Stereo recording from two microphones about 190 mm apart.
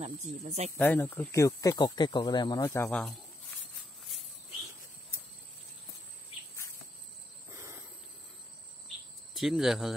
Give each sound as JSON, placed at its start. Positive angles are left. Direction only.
{"t": 0.0, "sound": "speech", "side_deg": -35}
{"t": 0.7, "sound": "speech", "side_deg": 10}
{"t": 9.3, "sound": "speech", "side_deg": 0}